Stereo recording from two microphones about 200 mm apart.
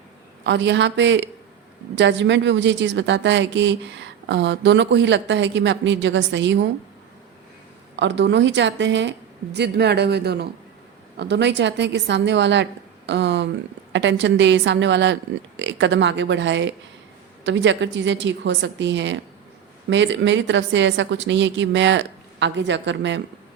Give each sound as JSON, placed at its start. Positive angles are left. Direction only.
{"t": 0.4, "sound": "a woman's voice", "side_deg": -60}
{"t": 7.9, "sound": "a woman's voice", "side_deg": -65}